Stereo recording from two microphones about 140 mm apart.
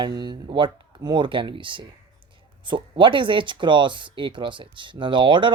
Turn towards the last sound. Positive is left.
turn(degrees=-35)  # may be behind; listen again after turning